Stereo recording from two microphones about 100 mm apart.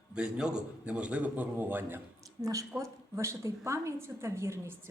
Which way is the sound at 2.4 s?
35° right (ahead or behind).